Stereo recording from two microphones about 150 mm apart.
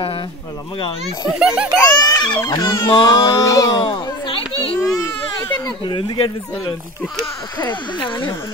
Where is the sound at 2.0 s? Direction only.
25° left (ahead or behind).